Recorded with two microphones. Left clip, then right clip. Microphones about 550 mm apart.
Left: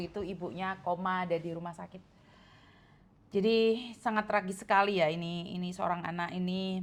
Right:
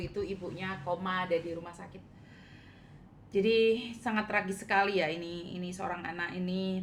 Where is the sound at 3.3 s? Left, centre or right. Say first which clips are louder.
Right 1 dB; left.